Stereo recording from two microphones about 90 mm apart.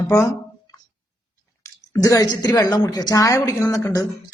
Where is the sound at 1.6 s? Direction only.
40° left (ahead or behind).